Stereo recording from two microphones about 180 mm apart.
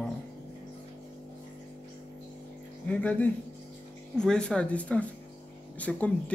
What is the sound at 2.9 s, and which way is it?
Speech, 10° left (ahead or behind).